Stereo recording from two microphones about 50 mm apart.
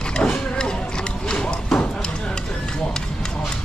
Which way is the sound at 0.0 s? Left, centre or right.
Centre.